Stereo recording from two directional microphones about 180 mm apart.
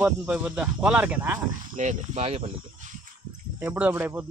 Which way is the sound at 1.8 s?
40° right (ahead or behind).